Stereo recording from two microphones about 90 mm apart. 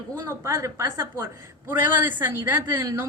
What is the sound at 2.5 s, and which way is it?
Speech, 35° right (ahead or behind).